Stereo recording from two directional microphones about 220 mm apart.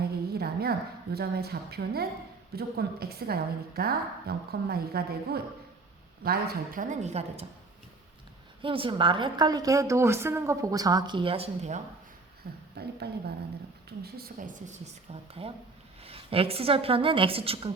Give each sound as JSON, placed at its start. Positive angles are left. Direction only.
{"t": 0.0, "sound": "a woman's voice", "side_deg": -45}
{"t": 7.0, "sound": "a woman's voice", "side_deg": -30}
{"t": 8.6, "sound": "a woman's voice", "side_deg": -25}
{"t": 12.4, "sound": "a woman's voice", "side_deg": -45}